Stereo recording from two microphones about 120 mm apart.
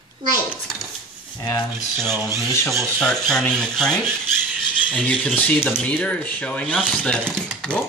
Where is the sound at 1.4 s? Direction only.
35° left (ahead or behind).